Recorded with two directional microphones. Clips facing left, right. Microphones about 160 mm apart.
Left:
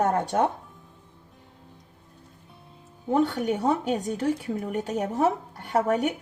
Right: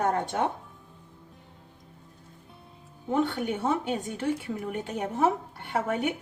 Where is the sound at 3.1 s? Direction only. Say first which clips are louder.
Left 3 dB; 40° left (ahead or behind).